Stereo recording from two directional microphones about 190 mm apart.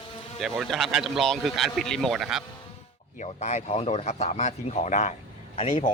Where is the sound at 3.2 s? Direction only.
40° left (ahead or behind).